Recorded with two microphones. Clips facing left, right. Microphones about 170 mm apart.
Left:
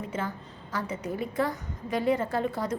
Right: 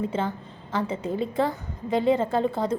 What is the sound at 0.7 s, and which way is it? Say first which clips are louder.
A woman's voice: right 5 dB; 25° right (ahead or behind).